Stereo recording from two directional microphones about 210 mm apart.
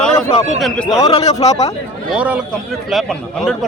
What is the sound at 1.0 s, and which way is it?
Speech, 30° left (ahead or behind).